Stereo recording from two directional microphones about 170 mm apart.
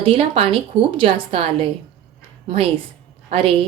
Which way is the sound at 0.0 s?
35° right (ahead or behind).